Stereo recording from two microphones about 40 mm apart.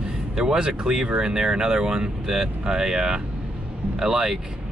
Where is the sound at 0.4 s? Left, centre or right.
Centre.